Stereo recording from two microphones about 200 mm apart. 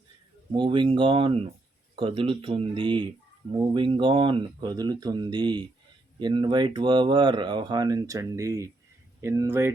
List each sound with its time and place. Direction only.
0.5 s speech: 25° right (ahead or behind)